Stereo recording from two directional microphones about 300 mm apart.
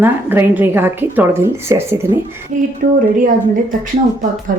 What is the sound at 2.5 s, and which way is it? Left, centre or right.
Speech, right.